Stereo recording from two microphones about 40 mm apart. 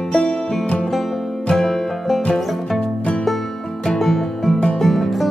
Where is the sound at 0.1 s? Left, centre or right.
Left.